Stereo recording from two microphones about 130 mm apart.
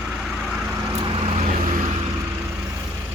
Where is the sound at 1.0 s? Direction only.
45° right (ahead or behind).